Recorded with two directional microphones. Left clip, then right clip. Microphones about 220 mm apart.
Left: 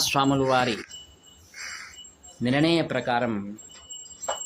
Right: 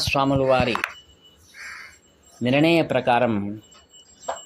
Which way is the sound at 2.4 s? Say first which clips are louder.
Right 4 dB; 10° right (ahead or behind).